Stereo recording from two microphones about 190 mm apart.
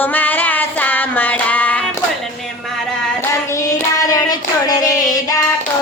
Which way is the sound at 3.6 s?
15° left (ahead or behind).